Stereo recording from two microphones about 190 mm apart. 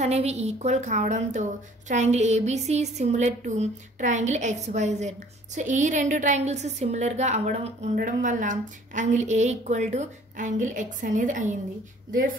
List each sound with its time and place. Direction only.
0.0 s a woman's voice: 35° right (ahead or behind)